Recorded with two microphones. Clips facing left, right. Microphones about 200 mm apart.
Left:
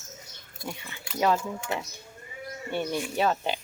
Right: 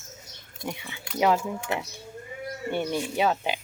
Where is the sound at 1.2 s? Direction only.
15° right (ahead or behind).